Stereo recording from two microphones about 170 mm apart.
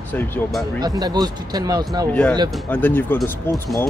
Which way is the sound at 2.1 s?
5° left (ahead or behind).